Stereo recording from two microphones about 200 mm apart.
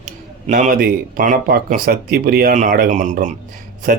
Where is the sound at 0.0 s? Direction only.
40° right (ahead or behind).